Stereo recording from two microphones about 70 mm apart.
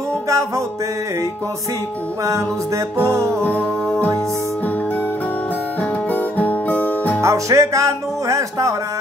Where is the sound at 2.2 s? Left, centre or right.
Right.